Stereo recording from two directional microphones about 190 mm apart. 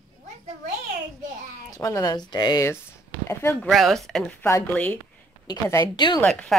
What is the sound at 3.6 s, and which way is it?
Speech, centre (ahead or behind).